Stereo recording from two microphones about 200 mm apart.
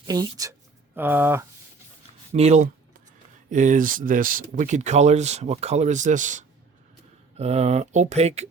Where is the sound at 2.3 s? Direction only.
35° right (ahead or behind).